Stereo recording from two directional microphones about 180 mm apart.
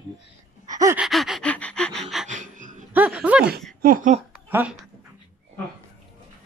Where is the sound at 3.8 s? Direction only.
50° right (ahead or behind).